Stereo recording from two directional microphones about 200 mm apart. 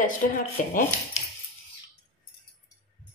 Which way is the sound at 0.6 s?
40° left (ahead or behind).